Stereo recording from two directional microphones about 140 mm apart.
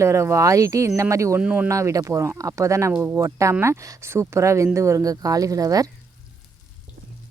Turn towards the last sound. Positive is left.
turn(degrees=-25)  # may be behind; listen again after turning